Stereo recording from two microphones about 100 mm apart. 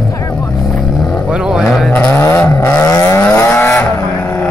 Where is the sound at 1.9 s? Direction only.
20° left (ahead or behind).